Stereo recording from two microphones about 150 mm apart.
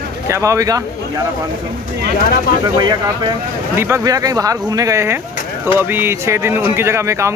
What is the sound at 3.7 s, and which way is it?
Speech, 15° right (ahead or behind).